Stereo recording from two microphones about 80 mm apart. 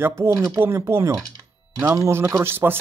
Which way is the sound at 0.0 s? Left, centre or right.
Right.